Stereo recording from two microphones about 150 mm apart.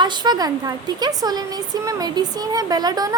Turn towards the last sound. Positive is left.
turn(degrees=-25)  # may be behind; listen again after turning